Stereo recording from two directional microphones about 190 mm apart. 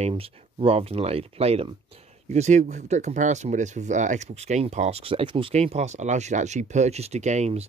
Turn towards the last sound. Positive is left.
turn(degrees=-35)  # may be behind; listen again after turning